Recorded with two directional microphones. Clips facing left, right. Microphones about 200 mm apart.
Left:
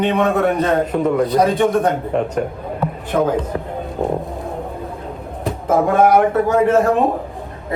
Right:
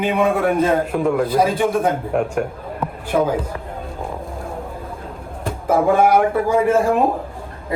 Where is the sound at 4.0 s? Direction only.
25° left (ahead or behind).